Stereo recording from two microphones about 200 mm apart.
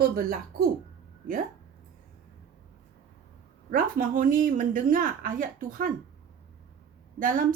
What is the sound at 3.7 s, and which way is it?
Speech, 45° right (ahead or behind).